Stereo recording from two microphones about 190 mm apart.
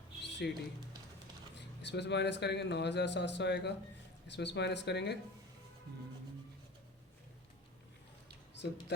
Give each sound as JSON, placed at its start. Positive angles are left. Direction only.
{"t": 0.2, "sound": "music", "side_deg": 65}
{"t": 1.5, "sound": "speech", "side_deg": 65}